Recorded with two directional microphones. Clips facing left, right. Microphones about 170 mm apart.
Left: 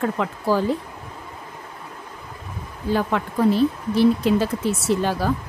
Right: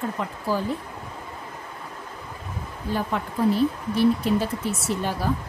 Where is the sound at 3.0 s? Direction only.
90° left.